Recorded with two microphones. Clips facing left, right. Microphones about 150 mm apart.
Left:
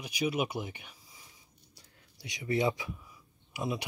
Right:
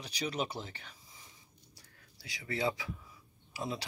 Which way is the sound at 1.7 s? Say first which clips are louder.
Left 4 dB; 20° left (ahead or behind).